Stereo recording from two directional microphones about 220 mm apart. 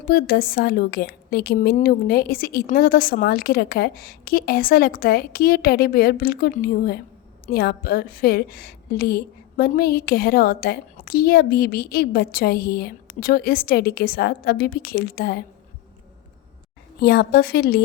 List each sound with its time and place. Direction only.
0.0 s a woman's voice: 45° left (ahead or behind)
17.0 s a woman's voice: 45° left (ahead or behind)